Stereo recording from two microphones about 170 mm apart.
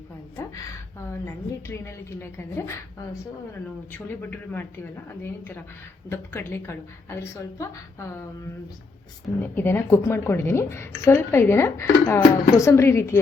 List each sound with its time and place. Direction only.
1.2 s a woman's voice: 15° left (ahead or behind)
3.9 s a woman's voice: 10° left (ahead or behind)
9.4 s a woman's voice: 10° left (ahead or behind)